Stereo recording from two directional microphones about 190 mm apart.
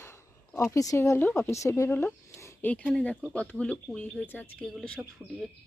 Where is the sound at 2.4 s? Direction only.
10° left (ahead or behind).